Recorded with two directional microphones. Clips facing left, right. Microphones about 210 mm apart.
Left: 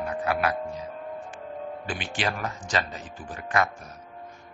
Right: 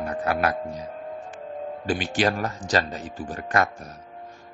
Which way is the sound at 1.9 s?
40° right (ahead or behind).